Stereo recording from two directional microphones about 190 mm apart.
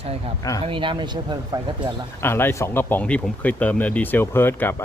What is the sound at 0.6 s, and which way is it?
Speech, 25° right (ahead or behind).